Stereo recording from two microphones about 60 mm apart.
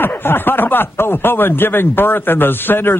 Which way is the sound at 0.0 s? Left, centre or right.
Left.